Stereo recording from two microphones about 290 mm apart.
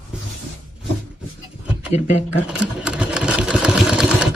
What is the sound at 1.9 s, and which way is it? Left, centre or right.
Speech, left.